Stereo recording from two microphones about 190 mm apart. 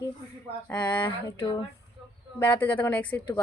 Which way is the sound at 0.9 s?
20° left (ahead or behind).